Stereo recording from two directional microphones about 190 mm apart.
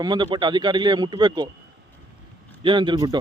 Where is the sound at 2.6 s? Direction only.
25° right (ahead or behind).